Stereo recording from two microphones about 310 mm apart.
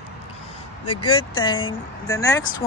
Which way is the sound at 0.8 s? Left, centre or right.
Left.